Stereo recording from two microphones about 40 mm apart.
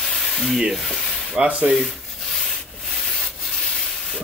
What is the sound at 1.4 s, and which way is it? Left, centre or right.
Speech, right.